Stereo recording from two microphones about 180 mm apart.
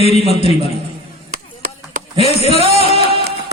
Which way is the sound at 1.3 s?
50° right (ahead or behind).